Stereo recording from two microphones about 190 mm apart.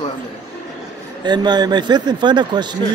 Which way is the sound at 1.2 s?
25° right (ahead or behind).